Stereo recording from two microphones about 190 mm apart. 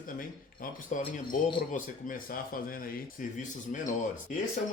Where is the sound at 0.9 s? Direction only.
40° left (ahead or behind).